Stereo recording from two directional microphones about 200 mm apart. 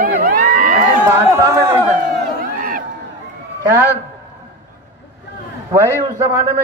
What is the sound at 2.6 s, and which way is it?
Crowd, 45° right (ahead or behind).